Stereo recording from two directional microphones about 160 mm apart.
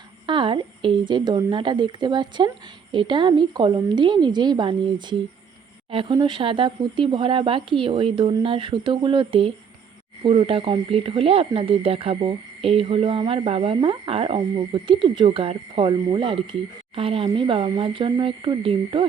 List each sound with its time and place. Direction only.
0.3 s a woman's voice: 30° right (ahead or behind)